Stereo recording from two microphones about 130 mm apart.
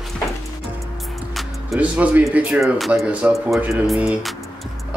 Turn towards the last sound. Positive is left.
turn(degrees=-5)  # may be behind; listen again after turning